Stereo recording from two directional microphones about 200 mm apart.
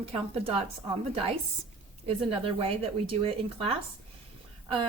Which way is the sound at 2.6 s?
25° right (ahead or behind).